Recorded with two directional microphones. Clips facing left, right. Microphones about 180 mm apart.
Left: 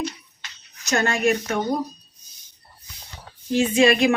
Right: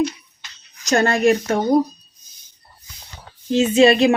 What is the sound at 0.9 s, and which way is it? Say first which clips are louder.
Speech: right 5 dB; 35° right (ahead or behind).